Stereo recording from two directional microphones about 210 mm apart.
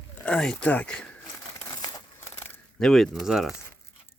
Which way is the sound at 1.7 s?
15° left (ahead or behind).